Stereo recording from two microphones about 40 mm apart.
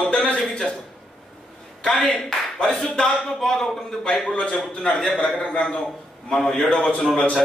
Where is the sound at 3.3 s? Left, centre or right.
Centre.